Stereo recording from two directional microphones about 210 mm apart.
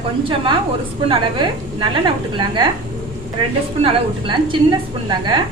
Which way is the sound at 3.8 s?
25° right (ahead or behind).